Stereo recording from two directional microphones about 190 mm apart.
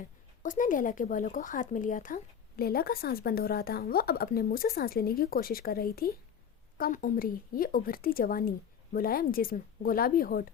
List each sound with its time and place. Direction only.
0.4 s speech: 45° left (ahead or behind)